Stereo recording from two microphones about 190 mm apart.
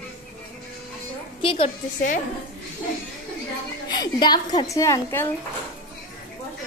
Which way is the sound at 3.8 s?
20° left (ahead or behind).